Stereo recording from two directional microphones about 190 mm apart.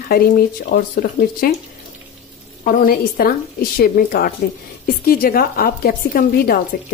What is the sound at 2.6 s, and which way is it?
A woman's voice, 45° left (ahead or behind).